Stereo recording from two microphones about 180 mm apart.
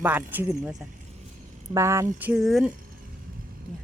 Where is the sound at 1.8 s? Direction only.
15° right (ahead or behind).